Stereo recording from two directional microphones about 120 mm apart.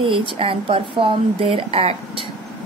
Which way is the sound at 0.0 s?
45° right (ahead or behind).